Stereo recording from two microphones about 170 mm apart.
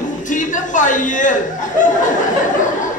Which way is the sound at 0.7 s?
50° left (ahead or behind).